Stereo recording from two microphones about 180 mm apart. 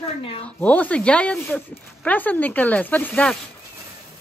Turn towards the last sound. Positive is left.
turn(degrees=5)  # may be behind; listen again after turning